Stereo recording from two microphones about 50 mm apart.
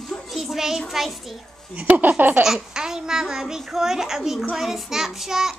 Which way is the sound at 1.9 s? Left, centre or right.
Right.